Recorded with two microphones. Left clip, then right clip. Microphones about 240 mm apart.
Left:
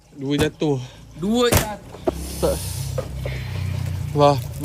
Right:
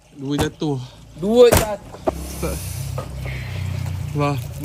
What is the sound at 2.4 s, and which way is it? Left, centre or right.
Speech, centre.